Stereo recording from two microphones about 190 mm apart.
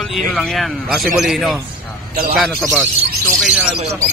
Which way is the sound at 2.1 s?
50° right (ahead or behind).